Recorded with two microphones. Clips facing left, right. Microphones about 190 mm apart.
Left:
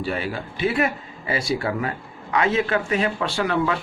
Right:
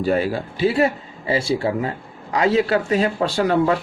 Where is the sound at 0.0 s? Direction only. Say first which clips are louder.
Right 7 dB; 40° right (ahead or behind).